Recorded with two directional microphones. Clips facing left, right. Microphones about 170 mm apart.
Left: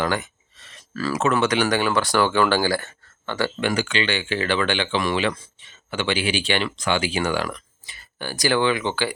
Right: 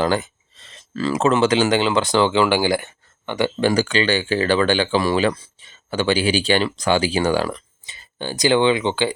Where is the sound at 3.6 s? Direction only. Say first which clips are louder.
Right 6 dB; 40° right (ahead or behind); by 9.1 s 20° right (ahead or behind).